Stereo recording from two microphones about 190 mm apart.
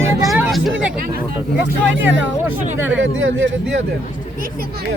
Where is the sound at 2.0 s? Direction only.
75° right (ahead or behind).